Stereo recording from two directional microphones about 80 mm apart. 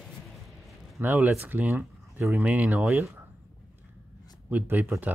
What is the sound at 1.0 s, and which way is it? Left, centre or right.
Speech, right.